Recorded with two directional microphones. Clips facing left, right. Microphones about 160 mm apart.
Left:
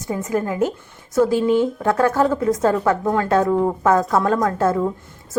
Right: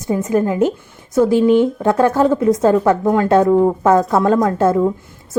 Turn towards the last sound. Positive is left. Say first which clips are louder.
# right 4 dB
turn(degrees=-25)  # may be behind; listen again after turning